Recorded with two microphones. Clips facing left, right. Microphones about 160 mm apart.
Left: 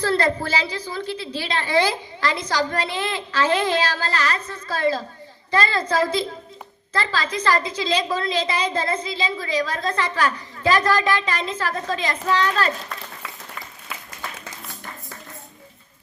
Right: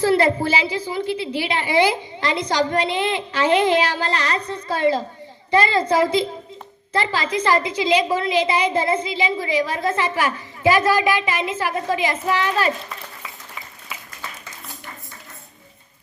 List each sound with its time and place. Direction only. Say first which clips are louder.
0.0 s a woman's voice: right 4 dB; 15° right (ahead or behind)